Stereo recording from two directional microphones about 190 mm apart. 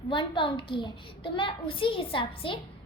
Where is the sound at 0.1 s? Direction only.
25° left (ahead or behind).